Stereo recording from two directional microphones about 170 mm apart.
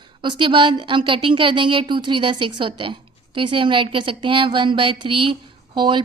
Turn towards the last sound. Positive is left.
turn(degrees=-30)  # may be behind; listen again after turning